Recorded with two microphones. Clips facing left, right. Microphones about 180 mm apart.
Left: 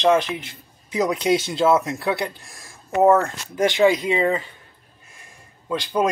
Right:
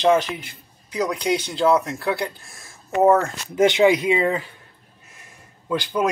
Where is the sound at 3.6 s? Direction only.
20° right (ahead or behind).